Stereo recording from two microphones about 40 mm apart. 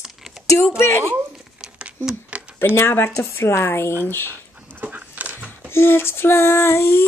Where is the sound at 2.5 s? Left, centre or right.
Left.